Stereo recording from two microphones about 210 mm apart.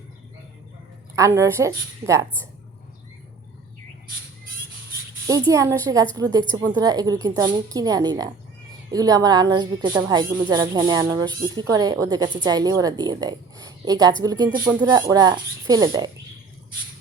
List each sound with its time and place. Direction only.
1.1 s a woman's voice: 15° right (ahead or behind)
5.2 s a woman's voice: 15° right (ahead or behind)